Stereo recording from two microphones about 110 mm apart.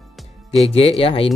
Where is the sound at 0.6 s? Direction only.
65° left (ahead or behind).